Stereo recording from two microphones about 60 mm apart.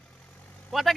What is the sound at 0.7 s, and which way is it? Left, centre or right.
Speech, centre.